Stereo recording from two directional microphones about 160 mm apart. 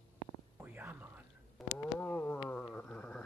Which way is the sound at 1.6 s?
Centre (ahead or behind).